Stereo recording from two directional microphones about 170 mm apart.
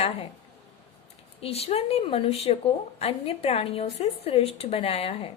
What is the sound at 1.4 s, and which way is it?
Speech, 35° left (ahead or behind).